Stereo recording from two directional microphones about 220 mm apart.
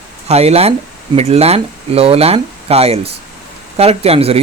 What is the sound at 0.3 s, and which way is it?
Speech, 30° right (ahead or behind).